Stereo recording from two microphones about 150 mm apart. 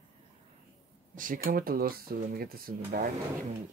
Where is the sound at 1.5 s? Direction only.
75° right (ahead or behind).